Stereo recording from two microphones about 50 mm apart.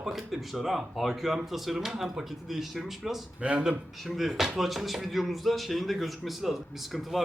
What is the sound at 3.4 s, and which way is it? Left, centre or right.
Speech, right.